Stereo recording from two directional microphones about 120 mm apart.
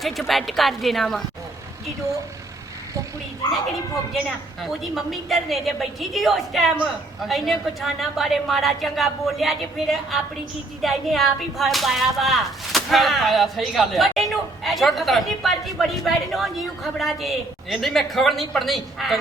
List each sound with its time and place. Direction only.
0.0 s whip: centre (ahead or behind)
4.6 s whip: centre (ahead or behind)